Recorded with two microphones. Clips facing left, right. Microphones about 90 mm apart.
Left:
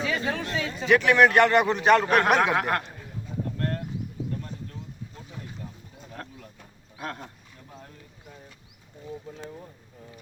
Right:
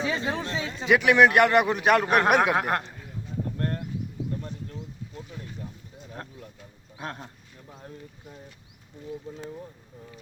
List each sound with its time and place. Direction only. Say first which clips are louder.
0.0 s a sound: even; 25° right (ahead or behind)
0.4 s chatter: left 1 dB; 30° right (ahead or behind)
0.9 s a man's voice: even; 15° right (ahead or behind)
6.9 s speech: left 1 dB; 25° right (ahead or behind)